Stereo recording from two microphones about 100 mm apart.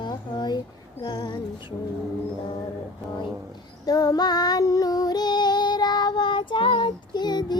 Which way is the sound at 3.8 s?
40° left (ahead or behind).